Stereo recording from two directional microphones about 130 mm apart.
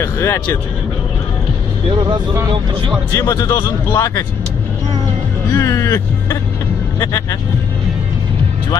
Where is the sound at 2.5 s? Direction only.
45° right (ahead or behind).